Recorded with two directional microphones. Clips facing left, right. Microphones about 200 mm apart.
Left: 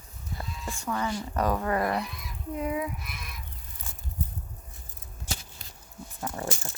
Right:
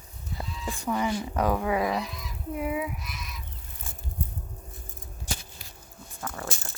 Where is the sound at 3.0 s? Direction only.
55° left (ahead or behind).